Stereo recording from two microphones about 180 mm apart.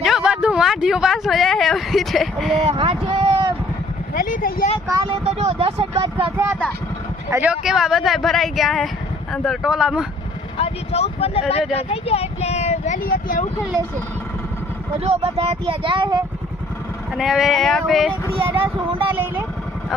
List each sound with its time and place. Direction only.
0.0 s speech: 5° right (ahead or behind)
2.6 s speech: 30° right (ahead or behind)
4.1 s speech: 50° left (ahead or behind)
4.9 s speech: 30° right (ahead or behind)
7.3 s speech: 10° right (ahead or behind)
10.6 s speech: 35° left (ahead or behind)
15.0 s speech: 35° right (ahead or behind)
17.2 s speech: centre (ahead or behind)
18.1 s speech: 30° right (ahead or behind)